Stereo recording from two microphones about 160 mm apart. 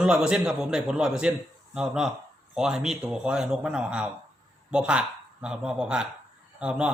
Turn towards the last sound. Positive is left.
turn(degrees=-5)  # may be behind; listen again after turning